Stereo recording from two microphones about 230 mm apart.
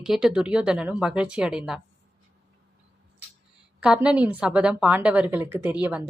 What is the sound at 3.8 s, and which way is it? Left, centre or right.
A woman's voice, centre.